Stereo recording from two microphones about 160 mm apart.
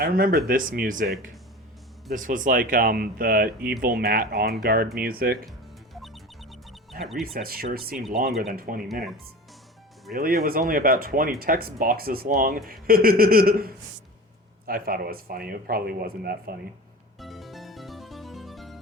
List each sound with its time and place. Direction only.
0.0 s speech: 65° right (ahead or behind)
5.5 s music: centre (ahead or behind)
7.0 s speech: centre (ahead or behind)
7.3 s speech: 70° right (ahead or behind)
10.2 s speech: 65° right (ahead or behind)
17.2 s music: centre (ahead or behind)